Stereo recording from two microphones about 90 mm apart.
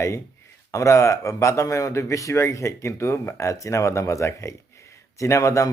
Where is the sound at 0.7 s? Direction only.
35° left (ahead or behind).